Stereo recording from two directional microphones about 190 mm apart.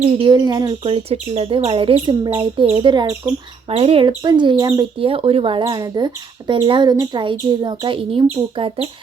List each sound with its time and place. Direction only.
0.0 s speech: 30° right (ahead or behind)